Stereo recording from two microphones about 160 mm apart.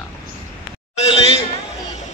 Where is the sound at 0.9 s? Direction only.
40° left (ahead or behind).